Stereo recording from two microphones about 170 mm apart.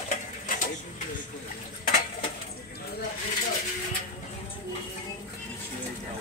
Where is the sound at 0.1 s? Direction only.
55° left (ahead or behind).